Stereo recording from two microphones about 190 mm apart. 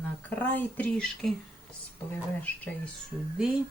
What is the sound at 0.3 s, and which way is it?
Speech, 10° left (ahead or behind).